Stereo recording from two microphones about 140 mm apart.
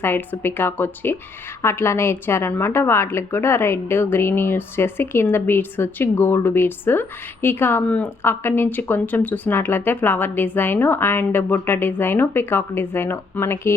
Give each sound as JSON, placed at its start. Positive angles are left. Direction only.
{"t": 0.0, "sound": "a woman's voice", "side_deg": 15}